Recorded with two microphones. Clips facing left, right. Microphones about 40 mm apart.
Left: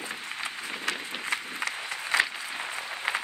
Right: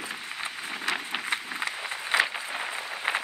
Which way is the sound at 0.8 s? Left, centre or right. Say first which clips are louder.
Right 4 dB; right.